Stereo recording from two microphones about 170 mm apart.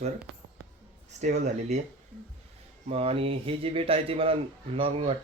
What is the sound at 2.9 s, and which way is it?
Speech, 35° right (ahead or behind).